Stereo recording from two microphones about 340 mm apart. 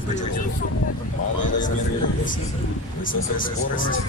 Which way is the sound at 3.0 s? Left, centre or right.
Left.